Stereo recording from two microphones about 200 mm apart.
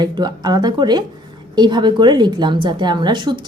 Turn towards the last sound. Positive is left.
turn(degrees=-25)  # may be behind; listen again after turning